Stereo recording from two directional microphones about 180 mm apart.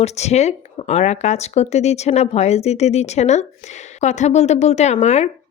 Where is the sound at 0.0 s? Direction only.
35° left (ahead or behind).